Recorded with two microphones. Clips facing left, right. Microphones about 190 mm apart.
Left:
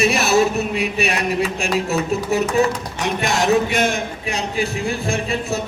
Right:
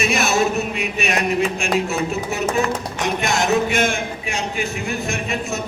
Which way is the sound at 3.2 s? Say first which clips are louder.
Left 2 dB; 35° left (ahead or behind).